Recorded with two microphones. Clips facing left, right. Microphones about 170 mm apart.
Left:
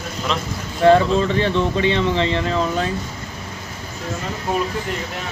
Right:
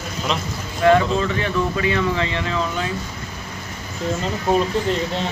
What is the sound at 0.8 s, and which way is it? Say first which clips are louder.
Speech: left 2 dB; 30° left (ahead or behind).